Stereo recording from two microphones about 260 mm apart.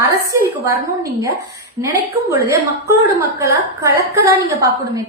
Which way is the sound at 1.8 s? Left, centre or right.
Centre.